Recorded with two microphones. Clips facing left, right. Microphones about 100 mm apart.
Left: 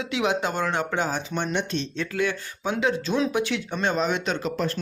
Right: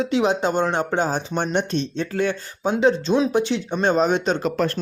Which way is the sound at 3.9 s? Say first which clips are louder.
Right 7 dB; 35° right (ahead or behind).